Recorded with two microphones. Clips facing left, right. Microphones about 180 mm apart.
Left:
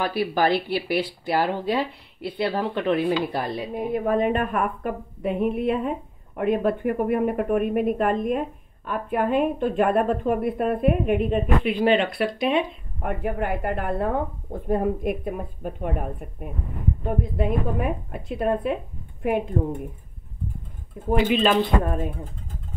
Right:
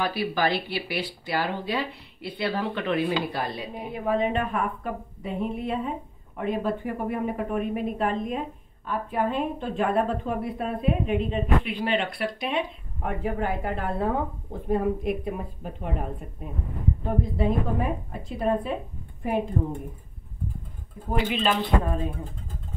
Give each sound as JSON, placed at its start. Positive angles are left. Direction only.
{"t": 0.0, "sound": "speech", "side_deg": 50}
{"t": 11.8, "sound": "speech", "side_deg": 90}
{"t": 13.0, "sound": "speech", "side_deg": 60}
{"t": 21.4, "sound": "speech", "side_deg": 65}